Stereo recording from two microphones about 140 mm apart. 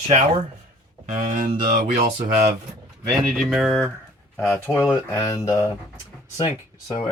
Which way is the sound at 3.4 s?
5° right (ahead or behind).